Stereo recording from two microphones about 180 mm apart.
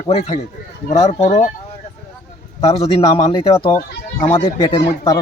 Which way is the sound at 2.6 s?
35° left (ahead or behind).